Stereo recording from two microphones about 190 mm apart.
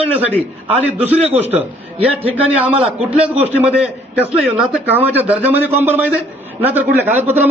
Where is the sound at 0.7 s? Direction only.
10° right (ahead or behind).